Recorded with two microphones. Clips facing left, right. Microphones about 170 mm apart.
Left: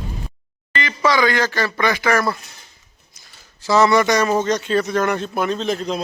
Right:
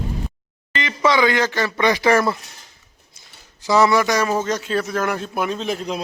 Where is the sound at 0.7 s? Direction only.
20° right (ahead or behind).